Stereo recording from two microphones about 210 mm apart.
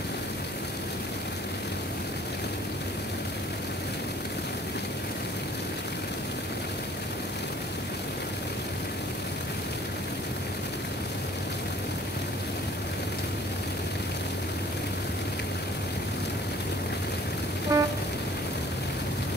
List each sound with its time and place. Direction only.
17.7 s vehicle: 15° right (ahead or behind)